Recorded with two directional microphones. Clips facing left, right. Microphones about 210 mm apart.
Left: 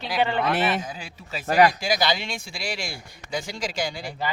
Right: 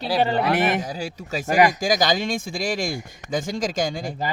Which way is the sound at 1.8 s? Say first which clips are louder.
Right 4 dB; 45° right (ahead or behind).